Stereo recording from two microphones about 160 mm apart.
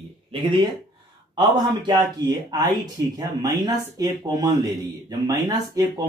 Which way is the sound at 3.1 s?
25° right (ahead or behind).